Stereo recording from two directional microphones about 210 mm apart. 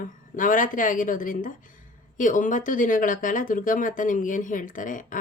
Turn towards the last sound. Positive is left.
turn(degrees=40)  # may be behind; listen again after turning